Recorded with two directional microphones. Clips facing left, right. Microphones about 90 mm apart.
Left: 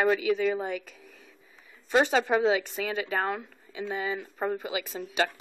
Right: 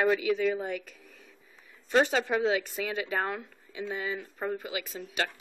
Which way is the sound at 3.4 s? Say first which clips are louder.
Left 1 dB; 10° left (ahead or behind).